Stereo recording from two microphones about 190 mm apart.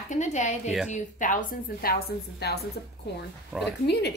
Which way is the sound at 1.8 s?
55° left (ahead or behind).